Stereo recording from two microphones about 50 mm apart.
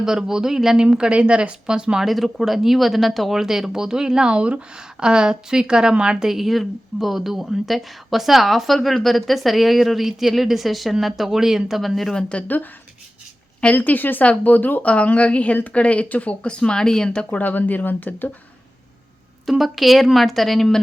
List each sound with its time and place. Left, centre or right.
0.0 s speech: centre
2.0 s speech: centre
12.1 s speech: left
13.7 s a woman's voice: left; by 17.1 s centre
17.3 s a woman's voice: left
19.5 s speech: centre